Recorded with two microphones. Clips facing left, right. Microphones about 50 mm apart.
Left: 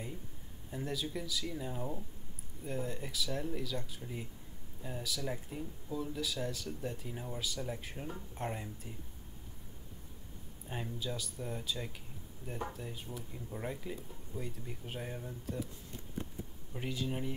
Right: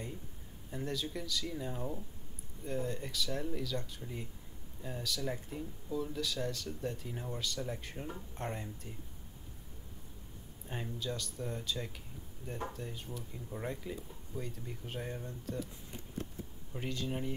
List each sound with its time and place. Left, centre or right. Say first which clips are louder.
0.7 s speech: even; centre
10.7 s speech: even; centre
16.7 s speech: even; centre